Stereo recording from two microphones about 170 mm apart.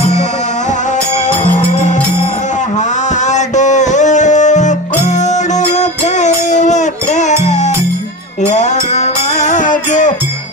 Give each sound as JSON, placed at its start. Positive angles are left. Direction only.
{"t": 3.2, "sound": "music", "side_deg": 45}